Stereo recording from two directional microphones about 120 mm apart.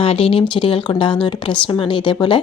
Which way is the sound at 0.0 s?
50° left (ahead or behind).